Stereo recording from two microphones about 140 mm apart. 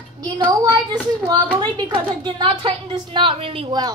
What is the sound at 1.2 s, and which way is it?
A woman's voice, 30° right (ahead or behind).